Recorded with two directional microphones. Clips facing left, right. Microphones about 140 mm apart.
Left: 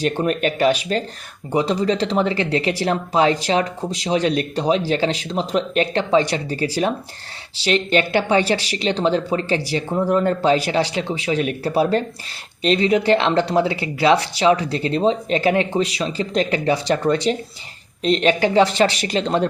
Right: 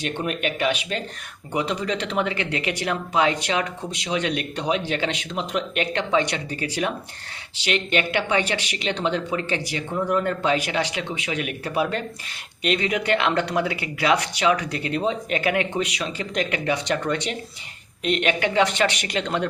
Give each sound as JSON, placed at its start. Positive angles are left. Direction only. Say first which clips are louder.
{"t": 0.0, "sound": "speech", "louder": "left 6 dB", "side_deg": 40}